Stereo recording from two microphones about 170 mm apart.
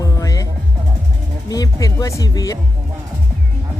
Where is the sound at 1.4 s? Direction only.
20° left (ahead or behind).